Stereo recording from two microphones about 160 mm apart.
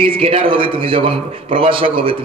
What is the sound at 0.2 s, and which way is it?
A man's voice, 35° right (ahead or behind).